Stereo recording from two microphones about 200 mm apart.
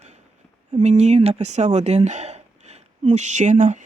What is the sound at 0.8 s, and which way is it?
Speech, 35° right (ahead or behind).